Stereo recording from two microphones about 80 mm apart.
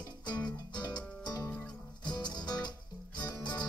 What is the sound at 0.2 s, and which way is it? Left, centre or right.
Music, left.